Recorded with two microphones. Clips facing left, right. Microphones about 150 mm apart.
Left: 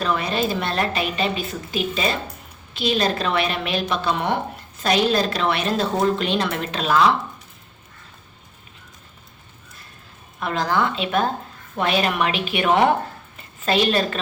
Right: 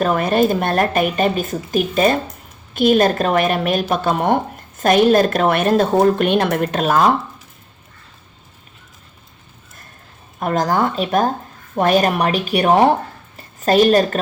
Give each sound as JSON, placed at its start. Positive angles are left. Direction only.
{"t": 0.0, "sound": "a woman's voice", "side_deg": -50}
{"t": 10.4, "sound": "a woman's voice", "side_deg": -45}